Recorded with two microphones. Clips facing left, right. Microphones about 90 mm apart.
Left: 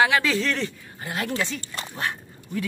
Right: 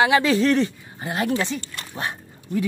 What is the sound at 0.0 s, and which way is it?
Speech, 20° right (ahead or behind).